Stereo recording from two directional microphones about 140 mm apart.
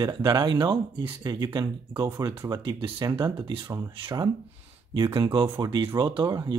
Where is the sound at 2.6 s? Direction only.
35° right (ahead or behind).